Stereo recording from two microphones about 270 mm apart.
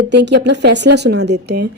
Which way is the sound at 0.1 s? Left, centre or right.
Right.